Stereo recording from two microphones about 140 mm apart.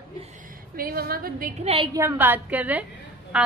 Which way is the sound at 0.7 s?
90° right.